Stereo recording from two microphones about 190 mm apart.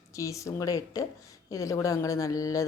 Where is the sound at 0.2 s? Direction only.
15° left (ahead or behind).